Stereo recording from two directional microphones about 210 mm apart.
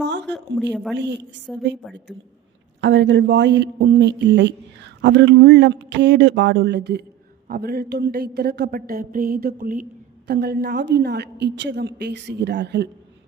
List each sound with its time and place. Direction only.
0.2 s speech: 5° left (ahead or behind)
0.9 s speech: 55° right (ahead or behind)
1.8 s speech: centre (ahead or behind)
2.8 s a woman's voice: 60° right (ahead or behind)